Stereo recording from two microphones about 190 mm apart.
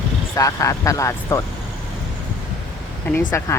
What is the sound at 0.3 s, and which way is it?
Speech, 15° left (ahead or behind).